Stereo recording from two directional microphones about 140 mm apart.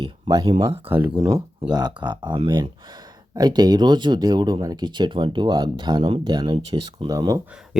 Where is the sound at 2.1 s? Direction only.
35° right (ahead or behind).